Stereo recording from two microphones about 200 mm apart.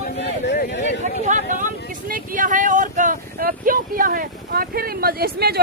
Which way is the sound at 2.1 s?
45° right (ahead or behind).